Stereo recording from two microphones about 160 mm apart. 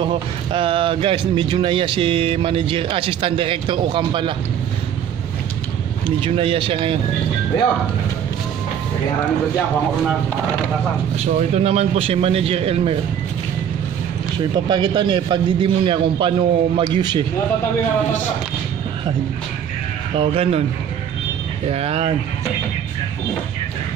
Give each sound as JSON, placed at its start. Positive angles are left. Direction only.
{"t": 0.0, "sound": "speech", "side_deg": -35}
{"t": 6.2, "sound": "speech", "side_deg": -35}
{"t": 11.1, "sound": "speech", "side_deg": -40}
{"t": 14.7, "sound": "speech", "side_deg": -30}
{"t": 20.2, "sound": "speech", "side_deg": -35}
{"t": 21.6, "sound": "speech", "side_deg": -40}